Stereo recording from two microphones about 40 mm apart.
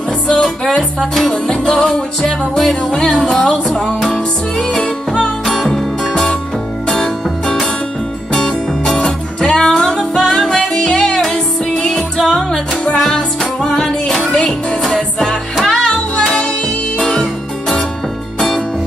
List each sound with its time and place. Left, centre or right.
0.3 s music: centre
14.3 s music: left
14.9 s music: centre